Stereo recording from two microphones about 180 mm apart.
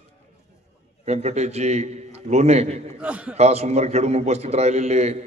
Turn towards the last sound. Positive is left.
turn(degrees=-35)  # may be behind; listen again after turning